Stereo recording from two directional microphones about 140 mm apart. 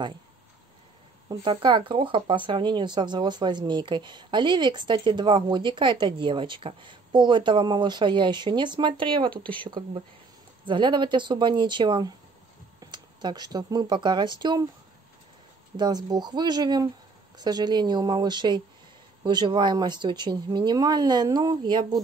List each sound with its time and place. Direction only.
1.3 s speech: 35° right (ahead or behind)
9.3 s speech: 10° left (ahead or behind)
9.7 s speech: 30° right (ahead or behind)
15.7 s speech: 30° right (ahead or behind)